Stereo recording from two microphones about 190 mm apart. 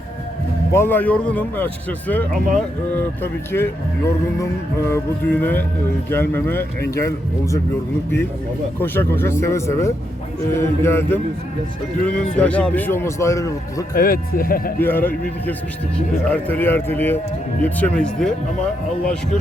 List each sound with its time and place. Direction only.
0.7 s a man's voice: 10° left (ahead or behind)
8.8 s a man's voice: 10° left (ahead or behind)
13.9 s speech: 50° left (ahead or behind)
14.8 s a man's voice: 10° left (ahead or behind)